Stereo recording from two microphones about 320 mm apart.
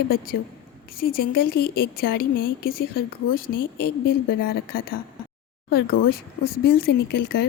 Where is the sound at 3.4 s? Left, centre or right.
Left.